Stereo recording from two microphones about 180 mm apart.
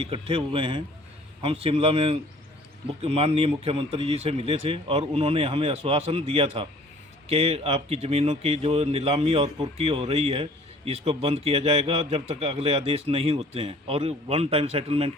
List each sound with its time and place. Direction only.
0.0 s speech: 30° right (ahead or behind)